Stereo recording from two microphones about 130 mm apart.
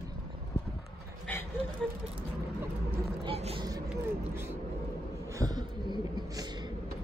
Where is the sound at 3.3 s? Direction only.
45° right (ahead or behind).